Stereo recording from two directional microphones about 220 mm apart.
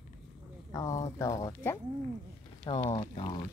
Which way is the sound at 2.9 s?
20° left (ahead or behind).